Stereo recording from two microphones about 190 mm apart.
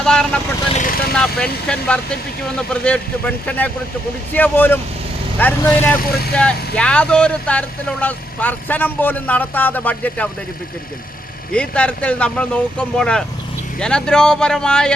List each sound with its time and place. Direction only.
0.0 s speech: 5° left (ahead or behind)
0.7 s speech: 45° left (ahead or behind)
1.1 s speech: 5° left (ahead or behind)
6.0 s speech: 55° left (ahead or behind)
6.3 s speech: 5° left (ahead or behind)
11.5 s speech: 5° left (ahead or behind)